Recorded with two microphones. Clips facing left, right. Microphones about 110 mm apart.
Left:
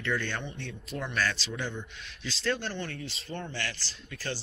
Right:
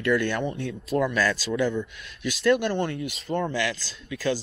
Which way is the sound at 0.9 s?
35° right (ahead or behind).